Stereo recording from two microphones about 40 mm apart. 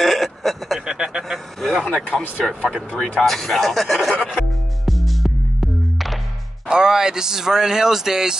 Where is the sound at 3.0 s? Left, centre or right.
Centre.